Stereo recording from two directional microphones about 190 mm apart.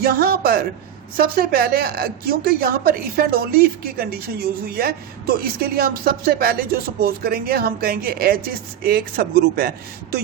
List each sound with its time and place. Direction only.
0.0 s a woman's voice: 50° right (ahead or behind)